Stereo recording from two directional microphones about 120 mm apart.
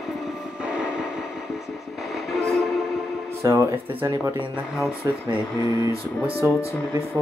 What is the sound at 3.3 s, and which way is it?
Speech, 20° right (ahead or behind).